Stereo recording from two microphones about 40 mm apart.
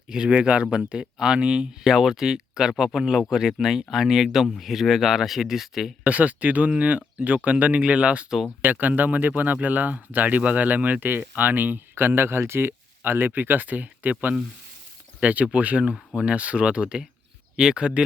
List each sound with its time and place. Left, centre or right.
0.3 s speech: right
1.8 s speech: centre
6.1 s speech: right
8.6 s speech: right
11.0 s speech: right
11.9 s speech: right
13.0 s speech: right